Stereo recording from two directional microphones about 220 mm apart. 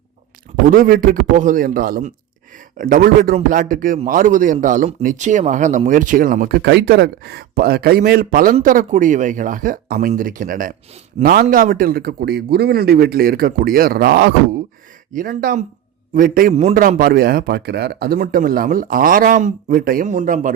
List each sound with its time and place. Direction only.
0.7 s a man's voice: 40° right (ahead or behind)